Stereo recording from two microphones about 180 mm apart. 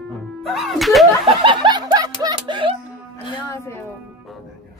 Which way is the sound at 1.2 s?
30° right (ahead or behind).